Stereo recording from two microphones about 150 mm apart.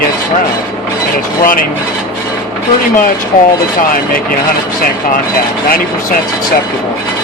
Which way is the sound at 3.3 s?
60° left (ahead or behind).